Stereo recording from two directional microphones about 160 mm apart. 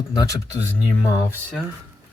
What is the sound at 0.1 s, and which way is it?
Speech, 25° left (ahead or behind).